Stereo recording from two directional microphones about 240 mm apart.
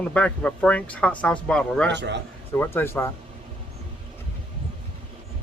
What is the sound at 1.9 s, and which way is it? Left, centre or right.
Speech, right.